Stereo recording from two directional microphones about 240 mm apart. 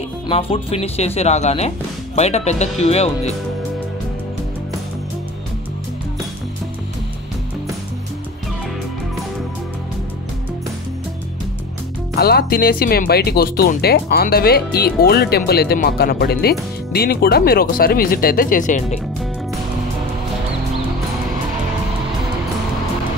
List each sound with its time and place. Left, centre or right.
0.3 s speech: left
12.2 s speech: left